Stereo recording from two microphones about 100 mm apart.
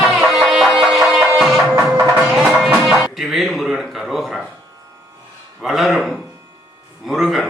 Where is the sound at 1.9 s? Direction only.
20° right (ahead or behind).